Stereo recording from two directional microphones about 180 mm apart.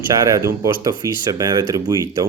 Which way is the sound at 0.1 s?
20° right (ahead or behind).